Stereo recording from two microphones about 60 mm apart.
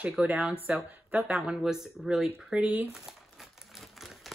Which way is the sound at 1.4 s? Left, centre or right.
Centre.